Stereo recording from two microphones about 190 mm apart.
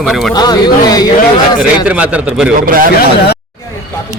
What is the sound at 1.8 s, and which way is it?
Speech, 5° right (ahead or behind).